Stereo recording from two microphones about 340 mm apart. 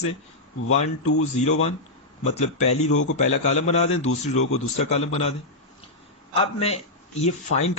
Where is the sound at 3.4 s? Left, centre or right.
Centre.